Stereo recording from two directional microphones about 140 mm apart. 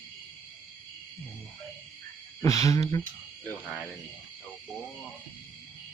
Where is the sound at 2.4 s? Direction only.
25° left (ahead or behind).